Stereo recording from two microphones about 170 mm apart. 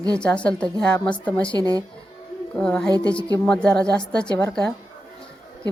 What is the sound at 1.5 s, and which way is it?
Speech, 25° right (ahead or behind).